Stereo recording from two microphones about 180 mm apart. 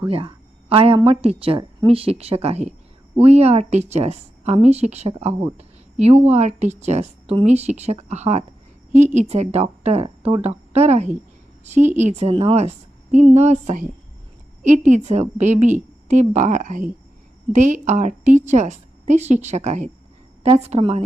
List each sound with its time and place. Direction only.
0.1 s a woman's voice: 30° right (ahead or behind)